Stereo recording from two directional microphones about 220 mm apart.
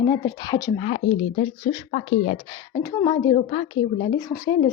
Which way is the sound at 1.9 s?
40° left (ahead or behind).